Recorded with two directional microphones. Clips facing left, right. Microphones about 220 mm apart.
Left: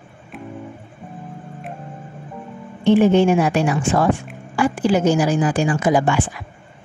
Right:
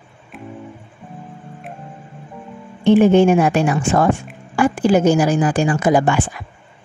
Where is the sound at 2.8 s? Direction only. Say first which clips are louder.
Right 2 dB; 50° right (ahead or behind).